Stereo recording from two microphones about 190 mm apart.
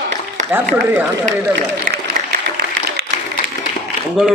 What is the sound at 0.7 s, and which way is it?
Speech, 10° right (ahead or behind).